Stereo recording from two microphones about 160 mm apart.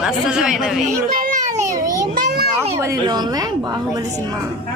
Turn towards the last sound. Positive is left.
turn(degrees=-25)  # may be behind; listen again after turning